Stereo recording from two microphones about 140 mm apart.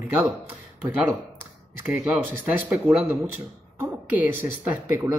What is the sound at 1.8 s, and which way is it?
A man's voice, 5° right (ahead or behind).